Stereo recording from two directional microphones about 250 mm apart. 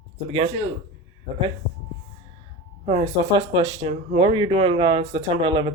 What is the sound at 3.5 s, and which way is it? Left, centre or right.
Speech, centre.